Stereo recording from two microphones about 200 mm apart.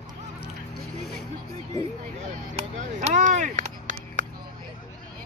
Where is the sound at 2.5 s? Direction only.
35° right (ahead or behind).